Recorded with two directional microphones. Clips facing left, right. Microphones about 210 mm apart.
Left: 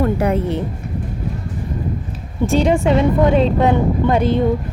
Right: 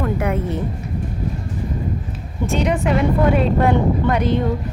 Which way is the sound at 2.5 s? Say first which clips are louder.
Left 4 dB; 30° left (ahead or behind).